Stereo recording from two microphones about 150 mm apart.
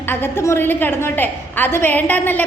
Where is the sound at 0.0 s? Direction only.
15° left (ahead or behind).